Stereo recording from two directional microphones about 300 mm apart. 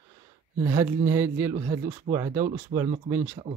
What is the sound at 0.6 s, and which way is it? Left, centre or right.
Speech, centre.